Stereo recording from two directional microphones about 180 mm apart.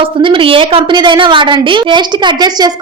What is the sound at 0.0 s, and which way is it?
A woman's voice, 30° right (ahead or behind).